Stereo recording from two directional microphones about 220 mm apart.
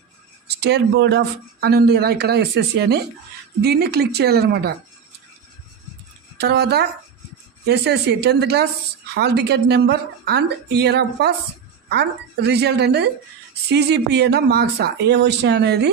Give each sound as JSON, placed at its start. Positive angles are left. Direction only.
{"t": 0.5, "sound": "speech", "side_deg": -50}
{"t": 6.4, "sound": "speech", "side_deg": -50}